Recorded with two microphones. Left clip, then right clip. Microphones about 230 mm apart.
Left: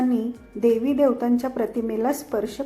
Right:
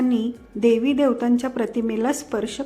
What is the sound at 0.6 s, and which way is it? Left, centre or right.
A woman's voice, right.